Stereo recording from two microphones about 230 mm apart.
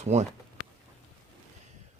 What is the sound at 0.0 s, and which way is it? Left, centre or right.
Speech, right.